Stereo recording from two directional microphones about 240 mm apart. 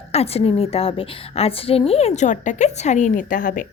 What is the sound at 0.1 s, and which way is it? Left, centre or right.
A woman's voice, left.